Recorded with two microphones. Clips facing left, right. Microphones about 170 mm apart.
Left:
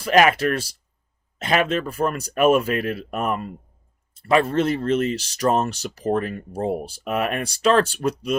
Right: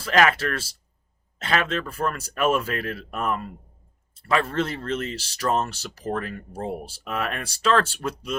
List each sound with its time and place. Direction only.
0.0 s speech: 15° left (ahead or behind)